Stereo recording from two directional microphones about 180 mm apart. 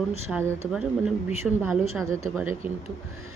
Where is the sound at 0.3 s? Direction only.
10° right (ahead or behind).